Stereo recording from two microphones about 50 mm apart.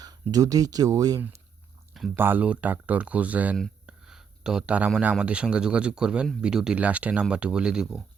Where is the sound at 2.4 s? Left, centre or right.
Right.